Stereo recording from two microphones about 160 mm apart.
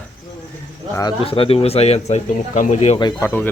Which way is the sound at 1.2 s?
35° left (ahead or behind).